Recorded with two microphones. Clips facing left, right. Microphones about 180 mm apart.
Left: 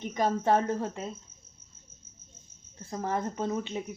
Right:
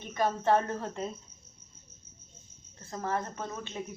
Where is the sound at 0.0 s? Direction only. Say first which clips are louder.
Left 2 dB; 15° left (ahead or behind).